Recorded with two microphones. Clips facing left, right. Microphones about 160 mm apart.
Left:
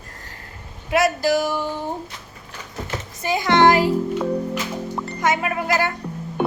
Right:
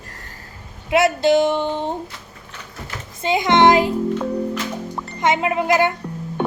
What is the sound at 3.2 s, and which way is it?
Speech, 20° right (ahead or behind).